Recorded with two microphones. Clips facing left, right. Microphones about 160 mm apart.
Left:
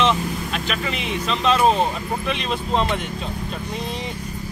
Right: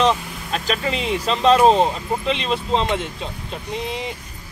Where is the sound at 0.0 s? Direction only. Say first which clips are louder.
Right 1 dB; 40° right (ahead or behind).